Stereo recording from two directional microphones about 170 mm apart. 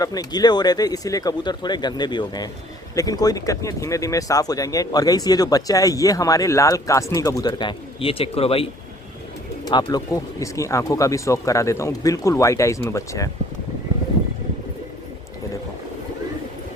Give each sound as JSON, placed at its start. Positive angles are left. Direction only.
{"t": 0.0, "sound": "speech", "side_deg": 20}
{"t": 9.6, "sound": "speech", "side_deg": 25}